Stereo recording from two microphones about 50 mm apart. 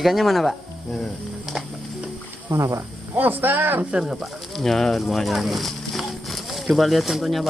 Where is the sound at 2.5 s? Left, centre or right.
Right.